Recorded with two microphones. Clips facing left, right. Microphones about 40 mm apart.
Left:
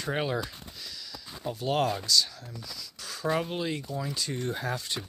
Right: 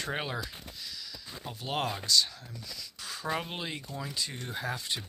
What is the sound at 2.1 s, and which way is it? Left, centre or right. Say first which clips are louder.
Speech: left 1 dB; right.